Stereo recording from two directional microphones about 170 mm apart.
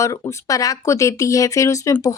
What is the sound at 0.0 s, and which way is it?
Speech, 20° left (ahead or behind).